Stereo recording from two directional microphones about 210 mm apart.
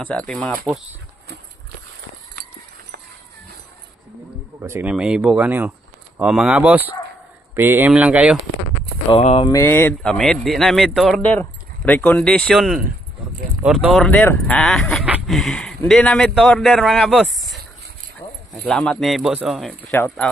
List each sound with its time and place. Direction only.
0.0 s speech: 5° left (ahead or behind)
4.6 s speech: 10° right (ahead or behind)
9.1 s speech: 25° left (ahead or behind)
9.5 s speech: 10° left (ahead or behind)
18.2 s a sound: 25° left (ahead or behind)
18.6 s speech: 5° left (ahead or behind)